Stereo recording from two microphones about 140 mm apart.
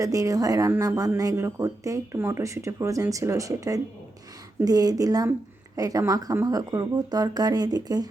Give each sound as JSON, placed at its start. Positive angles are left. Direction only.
{"t": 0.0, "sound": "speech", "side_deg": -25}